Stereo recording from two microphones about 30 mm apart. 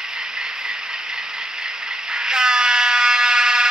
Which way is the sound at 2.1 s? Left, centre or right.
Right.